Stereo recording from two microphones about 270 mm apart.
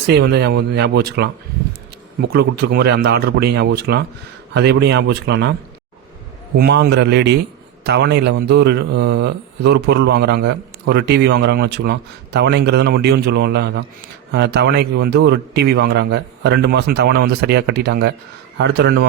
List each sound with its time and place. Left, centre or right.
0.1 s speech: right
6.6 s speech: right